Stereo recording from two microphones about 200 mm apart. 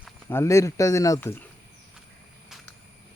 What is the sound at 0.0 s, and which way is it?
Speech, 10° left (ahead or behind).